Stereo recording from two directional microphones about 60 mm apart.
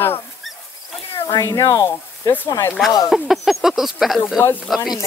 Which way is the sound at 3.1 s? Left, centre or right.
Centre.